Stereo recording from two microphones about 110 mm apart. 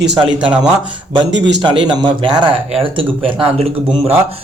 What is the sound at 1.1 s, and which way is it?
A man's voice, 45° right (ahead or behind).